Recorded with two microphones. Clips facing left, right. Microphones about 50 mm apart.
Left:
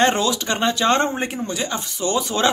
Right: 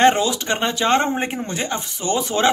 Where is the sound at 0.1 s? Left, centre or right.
Centre.